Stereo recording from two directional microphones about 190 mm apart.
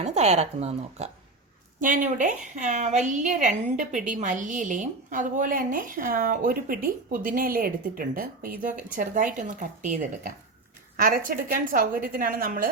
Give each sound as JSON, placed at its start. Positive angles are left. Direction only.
{"t": 0.0, "sound": "a woman's voice", "side_deg": -35}
{"t": 11.4, "sound": "a woman's voice", "side_deg": -45}